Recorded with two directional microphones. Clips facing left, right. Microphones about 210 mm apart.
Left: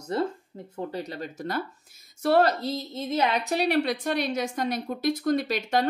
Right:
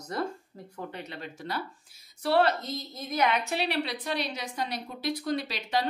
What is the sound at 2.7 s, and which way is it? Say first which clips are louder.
Speech: left 4 dB; 25° left (ahead or behind).